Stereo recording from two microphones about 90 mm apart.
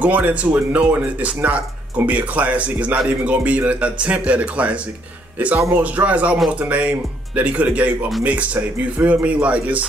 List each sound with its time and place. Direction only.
0.0 s speech: 15° right (ahead or behind)